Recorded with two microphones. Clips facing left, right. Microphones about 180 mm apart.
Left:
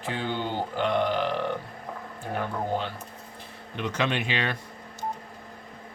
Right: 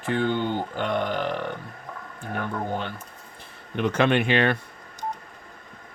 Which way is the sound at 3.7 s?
55° right (ahead or behind).